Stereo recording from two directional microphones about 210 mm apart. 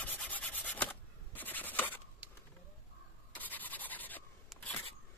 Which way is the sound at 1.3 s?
10° left (ahead or behind).